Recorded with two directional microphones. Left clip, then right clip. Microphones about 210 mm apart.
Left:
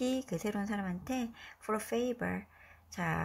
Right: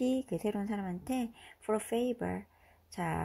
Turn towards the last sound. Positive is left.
turn(degrees=-25)  # may be behind; listen again after turning